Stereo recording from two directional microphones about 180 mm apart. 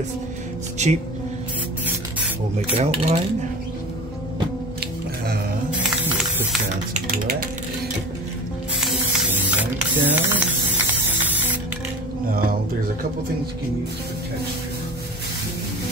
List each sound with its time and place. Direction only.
0.8 s dishes: 40° right (ahead or behind)
2.8 s dishes: 35° right (ahead or behind)
5.7 s music: 5° right (ahead or behind)
6.9 s speech: 50° right (ahead or behind)
9.3 s mechanisms: 10° right (ahead or behind)
12.3 s speech: 55° right (ahead or behind)